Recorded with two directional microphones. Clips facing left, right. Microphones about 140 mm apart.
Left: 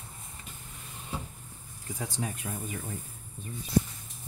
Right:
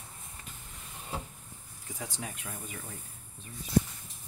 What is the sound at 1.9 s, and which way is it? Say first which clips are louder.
Speech: left 5 dB; 35° left (ahead or behind).